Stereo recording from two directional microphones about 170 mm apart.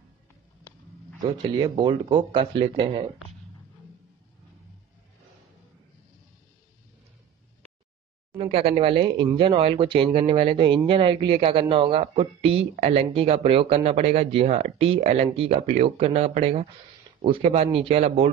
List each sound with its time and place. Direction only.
1.2 s speech: 25° right (ahead or behind)
8.4 s speech: 35° right (ahead or behind)